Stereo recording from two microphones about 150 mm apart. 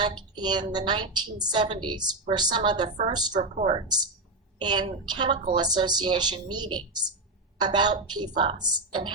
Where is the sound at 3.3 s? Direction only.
50° right (ahead or behind).